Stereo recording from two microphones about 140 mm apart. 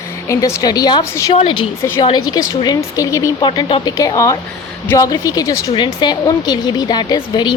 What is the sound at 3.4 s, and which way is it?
A woman's voice, 35° left (ahead or behind).